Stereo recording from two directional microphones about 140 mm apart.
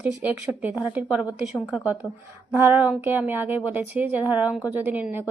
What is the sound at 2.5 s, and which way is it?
A woman's voice, 15° right (ahead or behind).